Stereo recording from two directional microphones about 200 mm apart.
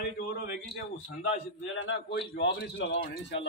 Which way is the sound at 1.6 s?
70° left (ahead or behind).